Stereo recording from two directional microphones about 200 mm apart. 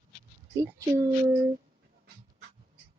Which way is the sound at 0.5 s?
15° right (ahead or behind).